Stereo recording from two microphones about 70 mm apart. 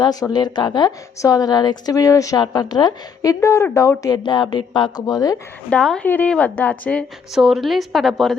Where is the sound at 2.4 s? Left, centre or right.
Left.